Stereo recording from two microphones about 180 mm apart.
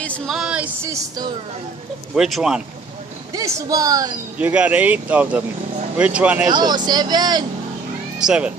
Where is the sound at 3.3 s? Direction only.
20° right (ahead or behind).